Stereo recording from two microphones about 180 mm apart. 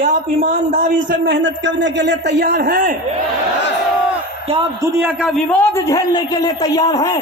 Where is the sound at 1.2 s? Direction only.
85° right; by 3.0 s 50° right (ahead or behind).